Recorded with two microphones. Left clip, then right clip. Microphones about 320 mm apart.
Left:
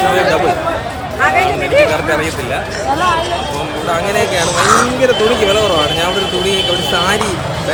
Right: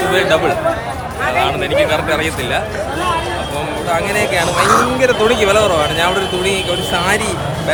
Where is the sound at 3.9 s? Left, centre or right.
Centre.